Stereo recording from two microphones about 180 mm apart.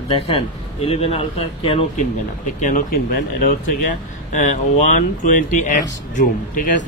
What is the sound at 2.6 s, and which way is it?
Speech, 50° left (ahead or behind).